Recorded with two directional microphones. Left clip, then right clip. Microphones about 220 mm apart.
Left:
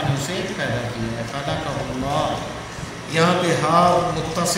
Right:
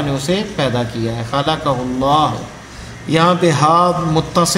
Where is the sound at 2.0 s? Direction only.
25° right (ahead or behind).